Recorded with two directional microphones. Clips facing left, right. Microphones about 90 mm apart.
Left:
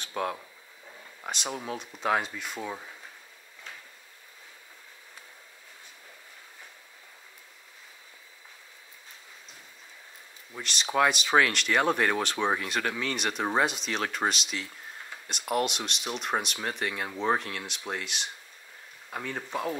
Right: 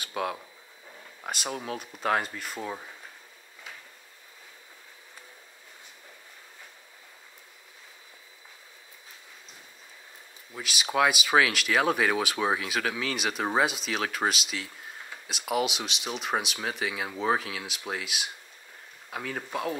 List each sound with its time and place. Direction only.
0.0 s a sound: 5° right (ahead or behind)
1.2 s speech: 5° right (ahead or behind)
10.5 s speech: 5° right (ahead or behind)